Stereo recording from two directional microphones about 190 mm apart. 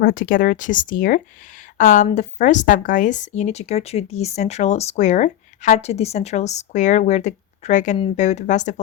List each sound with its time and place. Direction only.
0.0 s speech: 50° left (ahead or behind)